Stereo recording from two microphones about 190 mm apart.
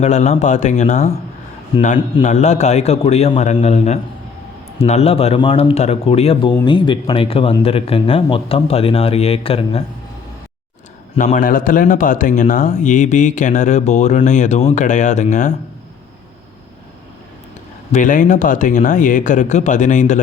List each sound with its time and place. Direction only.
0.0 s speech: 35° left (ahead or behind)
11.2 s speech: 45° left (ahead or behind)
17.9 s speech: 45° left (ahead or behind)